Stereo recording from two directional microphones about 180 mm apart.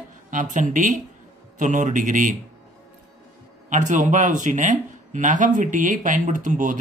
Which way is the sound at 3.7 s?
45° right (ahead or behind).